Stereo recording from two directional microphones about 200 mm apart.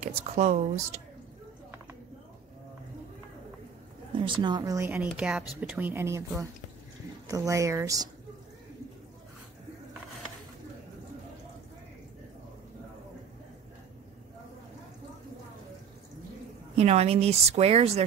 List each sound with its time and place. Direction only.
0.0 s speech: 35° right (ahead or behind)
4.2 s speech: 25° right (ahead or behind)
16.7 s speech: 30° right (ahead or behind)